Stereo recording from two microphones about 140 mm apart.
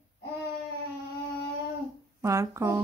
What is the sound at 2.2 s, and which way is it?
Speech, 25° right (ahead or behind).